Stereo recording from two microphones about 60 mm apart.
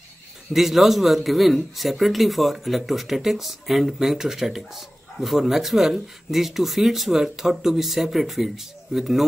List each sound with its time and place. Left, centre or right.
0.5 s speech: centre